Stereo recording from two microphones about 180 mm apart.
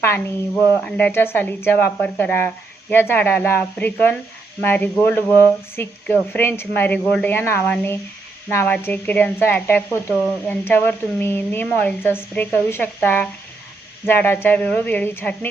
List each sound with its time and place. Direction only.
0.0 s speech: 10° left (ahead or behind)